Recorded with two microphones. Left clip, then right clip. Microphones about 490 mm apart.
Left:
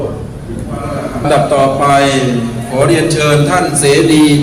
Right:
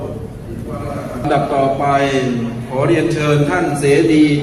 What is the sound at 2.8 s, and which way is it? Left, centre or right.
A man's voice, right.